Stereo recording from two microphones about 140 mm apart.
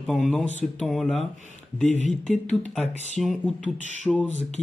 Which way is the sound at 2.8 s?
55° left (ahead or behind).